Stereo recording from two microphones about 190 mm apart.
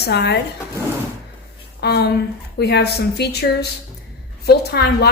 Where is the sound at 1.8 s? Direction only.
60° left (ahead or behind).